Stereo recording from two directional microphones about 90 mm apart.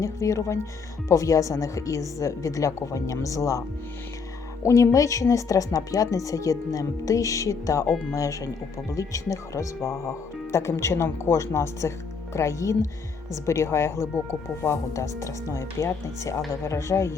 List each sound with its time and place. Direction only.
0.0 s speech: 35° left (ahead or behind)
4.6 s speech: 35° left (ahead or behind)